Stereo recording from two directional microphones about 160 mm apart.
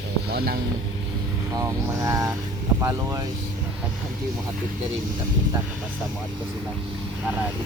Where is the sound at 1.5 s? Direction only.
20° right (ahead or behind).